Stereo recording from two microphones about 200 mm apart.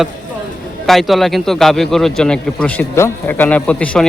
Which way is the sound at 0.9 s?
Centre (ahead or behind).